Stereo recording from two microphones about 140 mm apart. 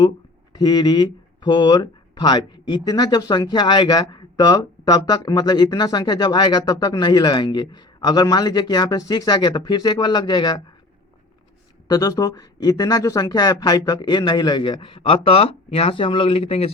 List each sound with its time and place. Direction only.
0.5 s speech: 30° left (ahead or behind)
11.9 s speech: 25° left (ahead or behind); by 16.7 s 45° left (ahead or behind)